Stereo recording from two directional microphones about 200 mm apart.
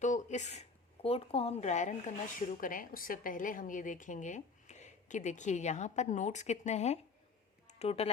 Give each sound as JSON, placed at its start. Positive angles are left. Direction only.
{"t": 0.0, "sound": "a woman's voice", "side_deg": 35}